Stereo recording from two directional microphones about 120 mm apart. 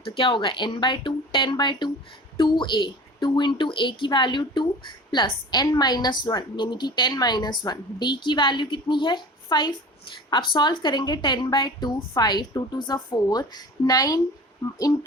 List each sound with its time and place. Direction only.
0.0 s a woman's voice: 45° left (ahead or behind)